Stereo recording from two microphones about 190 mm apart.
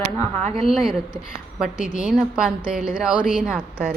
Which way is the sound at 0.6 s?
Centre (ahead or behind).